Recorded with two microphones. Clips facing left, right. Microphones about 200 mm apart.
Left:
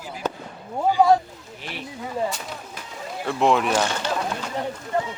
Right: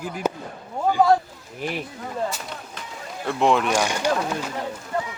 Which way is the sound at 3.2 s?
Centre (ahead or behind).